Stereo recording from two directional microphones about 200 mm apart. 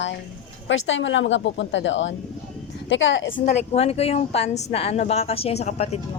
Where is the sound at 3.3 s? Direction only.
40° left (ahead or behind).